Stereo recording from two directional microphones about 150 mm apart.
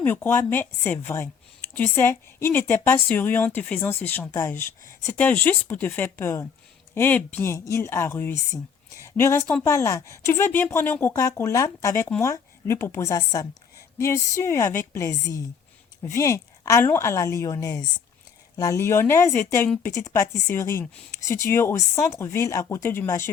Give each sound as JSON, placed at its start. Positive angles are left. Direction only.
{"t": 0.0, "sound": "a woman's voice", "side_deg": 15}